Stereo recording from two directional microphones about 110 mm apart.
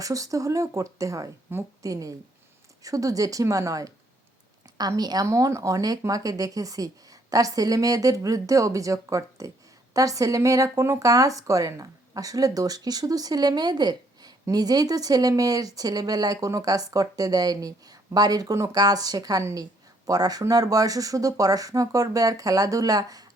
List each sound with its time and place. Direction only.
0.0 s speech: 30° right (ahead or behind)